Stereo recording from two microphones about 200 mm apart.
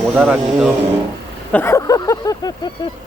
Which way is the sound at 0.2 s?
5° right (ahead or behind).